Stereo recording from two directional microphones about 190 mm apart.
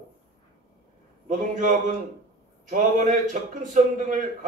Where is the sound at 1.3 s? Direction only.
40° right (ahead or behind).